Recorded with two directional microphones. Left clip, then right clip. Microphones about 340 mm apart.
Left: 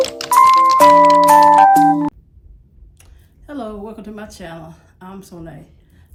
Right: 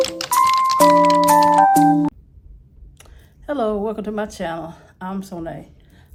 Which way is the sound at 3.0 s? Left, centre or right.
Right.